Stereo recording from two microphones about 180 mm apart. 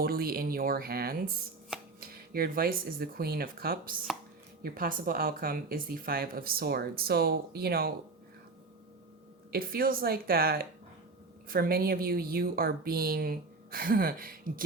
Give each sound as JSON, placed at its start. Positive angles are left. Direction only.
{"t": 0.0, "sound": "speech", "side_deg": -55}
{"t": 9.5, "sound": "speech", "side_deg": -55}